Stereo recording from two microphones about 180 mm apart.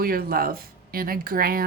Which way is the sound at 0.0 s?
55° right (ahead or behind).